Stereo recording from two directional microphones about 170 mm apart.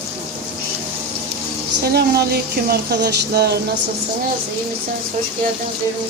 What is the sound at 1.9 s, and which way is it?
Speech, 70° right (ahead or behind).